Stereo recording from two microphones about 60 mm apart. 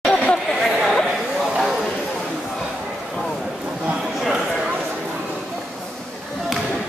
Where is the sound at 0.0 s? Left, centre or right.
Centre.